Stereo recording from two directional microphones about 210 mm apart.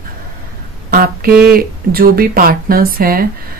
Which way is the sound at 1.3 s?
5° right (ahead or behind).